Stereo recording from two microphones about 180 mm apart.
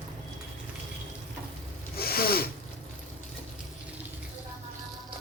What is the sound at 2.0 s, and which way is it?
Zipper, 60° left (ahead or behind).